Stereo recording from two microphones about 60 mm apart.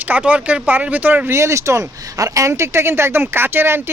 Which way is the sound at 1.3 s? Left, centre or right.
Right.